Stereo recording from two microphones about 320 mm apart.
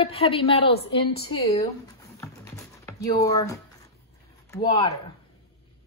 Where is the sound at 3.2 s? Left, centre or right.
Centre.